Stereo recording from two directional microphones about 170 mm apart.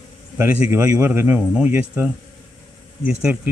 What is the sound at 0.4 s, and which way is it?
Speech, 15° right (ahead or behind).